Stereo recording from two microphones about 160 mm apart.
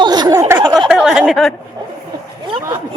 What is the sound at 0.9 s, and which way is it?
Speech, 5° right (ahead or behind).